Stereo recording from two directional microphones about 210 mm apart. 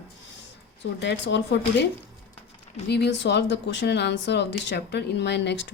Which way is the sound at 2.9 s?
55° left (ahead or behind).